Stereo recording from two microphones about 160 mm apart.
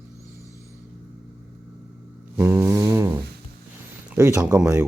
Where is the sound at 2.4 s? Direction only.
15° right (ahead or behind).